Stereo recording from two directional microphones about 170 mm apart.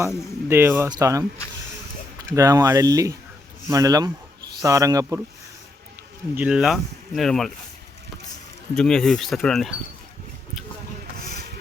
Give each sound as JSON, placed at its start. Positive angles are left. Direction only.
{"t": 0.4, "sound": "speech", "side_deg": -15}
{"t": 6.3, "sound": "speech", "side_deg": -5}
{"t": 8.7, "sound": "speech", "side_deg": 5}